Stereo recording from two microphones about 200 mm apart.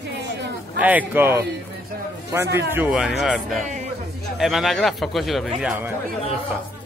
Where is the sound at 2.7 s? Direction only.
5° right (ahead or behind).